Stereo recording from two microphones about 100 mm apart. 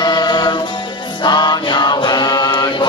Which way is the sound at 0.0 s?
45° left (ahead or behind).